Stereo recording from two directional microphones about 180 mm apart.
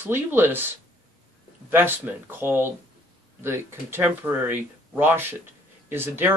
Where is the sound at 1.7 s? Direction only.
10° right (ahead or behind).